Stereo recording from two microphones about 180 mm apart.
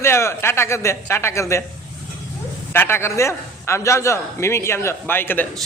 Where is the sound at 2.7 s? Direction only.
15° left (ahead or behind).